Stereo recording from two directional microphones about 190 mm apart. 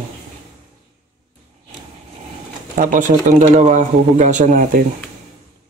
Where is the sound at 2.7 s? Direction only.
45° right (ahead or behind).